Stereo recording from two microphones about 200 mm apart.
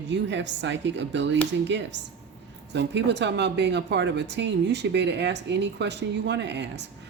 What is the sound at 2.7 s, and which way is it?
Speech, 60° right (ahead or behind).